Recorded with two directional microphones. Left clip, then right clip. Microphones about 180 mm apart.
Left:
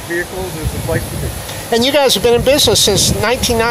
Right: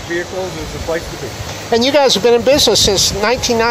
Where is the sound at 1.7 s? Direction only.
Centre (ahead or behind).